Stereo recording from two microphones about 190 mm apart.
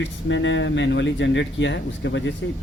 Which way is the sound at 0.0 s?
75° left (ahead or behind).